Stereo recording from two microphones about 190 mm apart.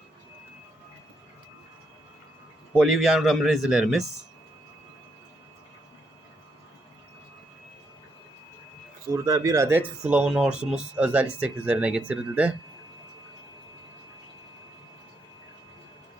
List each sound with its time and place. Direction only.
2.7 s speech: centre (ahead or behind)
9.2 s speech: 15° right (ahead or behind)